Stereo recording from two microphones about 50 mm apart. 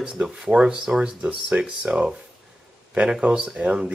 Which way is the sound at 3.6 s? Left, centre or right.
Right.